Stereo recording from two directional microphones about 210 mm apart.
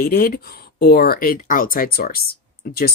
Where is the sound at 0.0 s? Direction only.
45° left (ahead or behind).